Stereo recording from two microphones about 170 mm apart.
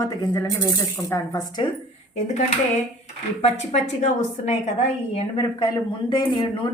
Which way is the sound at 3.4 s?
40° left (ahead or behind).